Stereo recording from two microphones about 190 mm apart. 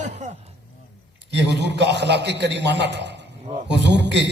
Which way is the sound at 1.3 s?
65° right (ahead or behind).